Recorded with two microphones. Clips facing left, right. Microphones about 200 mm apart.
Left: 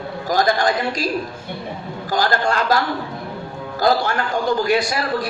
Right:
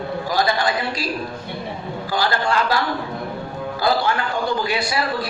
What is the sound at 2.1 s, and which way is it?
Speech, 45° left (ahead or behind).